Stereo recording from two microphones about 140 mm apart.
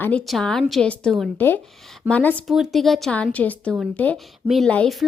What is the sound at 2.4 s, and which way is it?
A woman's voice, centre (ahead or behind).